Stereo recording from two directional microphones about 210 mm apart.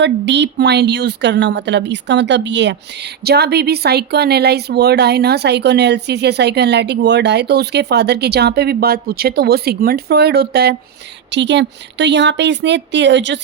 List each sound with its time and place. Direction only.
0.0 s a woman's voice: 55° right (ahead or behind)